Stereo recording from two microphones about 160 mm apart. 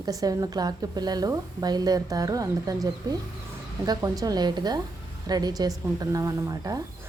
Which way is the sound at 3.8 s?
25° right (ahead or behind).